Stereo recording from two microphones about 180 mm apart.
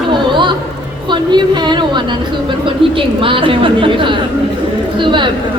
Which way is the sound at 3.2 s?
30° right (ahead or behind).